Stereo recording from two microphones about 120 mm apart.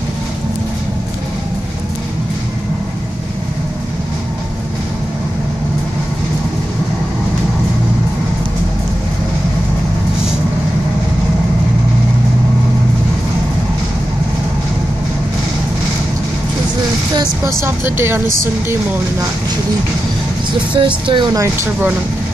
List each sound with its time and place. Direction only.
17.6 s speech: 20° right (ahead or behind)
20.7 s speech: 45° right (ahead or behind)